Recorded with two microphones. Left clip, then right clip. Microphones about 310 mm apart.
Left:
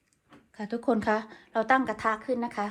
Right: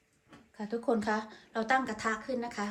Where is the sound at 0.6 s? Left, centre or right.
Left.